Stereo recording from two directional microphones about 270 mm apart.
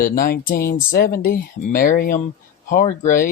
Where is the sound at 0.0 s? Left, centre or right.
Left.